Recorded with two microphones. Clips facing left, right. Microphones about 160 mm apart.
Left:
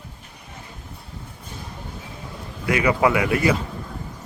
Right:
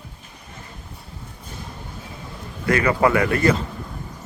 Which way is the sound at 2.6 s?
10° left (ahead or behind).